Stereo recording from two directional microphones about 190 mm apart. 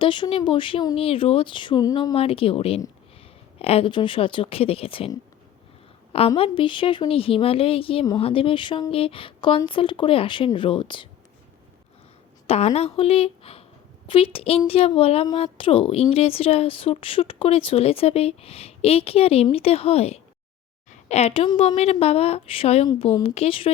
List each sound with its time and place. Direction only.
0.0 s a woman's voice: 25° left (ahead or behind)
6.1 s a woman's voice: 30° left (ahead or behind)
12.5 s a woman's voice: 35° left (ahead or behind)